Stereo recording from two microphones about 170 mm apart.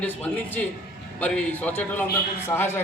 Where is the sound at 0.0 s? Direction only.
10° left (ahead or behind).